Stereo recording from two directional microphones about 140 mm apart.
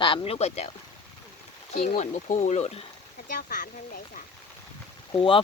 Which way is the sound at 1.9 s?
60° left (ahead or behind).